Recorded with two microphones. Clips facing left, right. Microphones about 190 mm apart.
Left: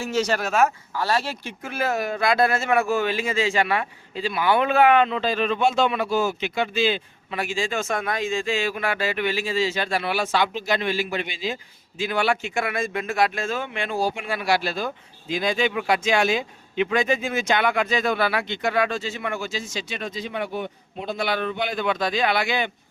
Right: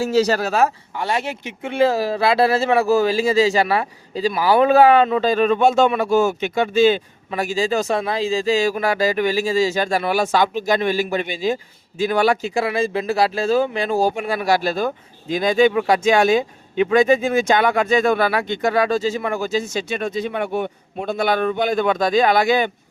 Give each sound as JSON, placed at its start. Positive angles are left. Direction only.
{"t": 0.0, "sound": "speech", "side_deg": -35}
{"t": 0.9, "sound": "a man's voice", "side_deg": -20}
{"t": 20.0, "sound": "a man's voice", "side_deg": -50}